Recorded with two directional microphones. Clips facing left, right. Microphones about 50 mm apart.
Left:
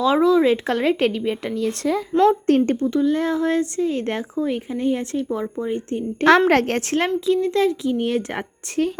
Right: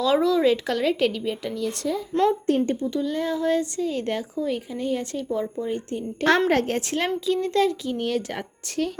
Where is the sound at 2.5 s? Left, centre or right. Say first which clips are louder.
Left 5 dB; left.